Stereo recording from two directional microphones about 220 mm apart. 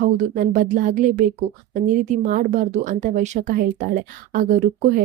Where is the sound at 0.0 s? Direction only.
35° right (ahead or behind).